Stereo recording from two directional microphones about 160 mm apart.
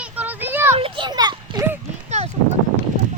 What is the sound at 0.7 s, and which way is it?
Children playing, 35° right (ahead or behind).